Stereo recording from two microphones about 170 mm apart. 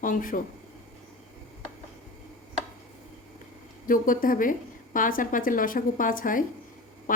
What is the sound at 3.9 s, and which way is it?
A woman's voice, 55° left (ahead or behind).